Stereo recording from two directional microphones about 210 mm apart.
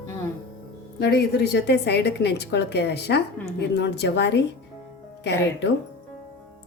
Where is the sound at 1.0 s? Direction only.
55° left (ahead or behind).